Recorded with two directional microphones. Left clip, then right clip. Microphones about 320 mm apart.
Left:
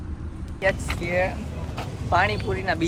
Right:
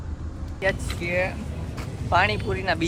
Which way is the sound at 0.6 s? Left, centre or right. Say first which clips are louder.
Left 2 dB; centre.